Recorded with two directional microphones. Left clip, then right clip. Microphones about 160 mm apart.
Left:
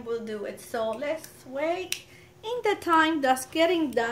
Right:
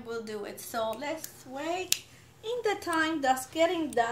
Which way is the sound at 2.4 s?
90° left.